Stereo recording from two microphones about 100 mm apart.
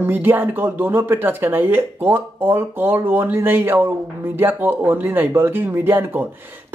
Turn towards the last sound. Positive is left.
turn(degrees=-20)  # may be behind; listen again after turning